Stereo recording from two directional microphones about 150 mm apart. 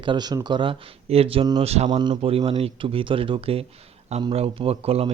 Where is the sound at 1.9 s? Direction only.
30° right (ahead or behind).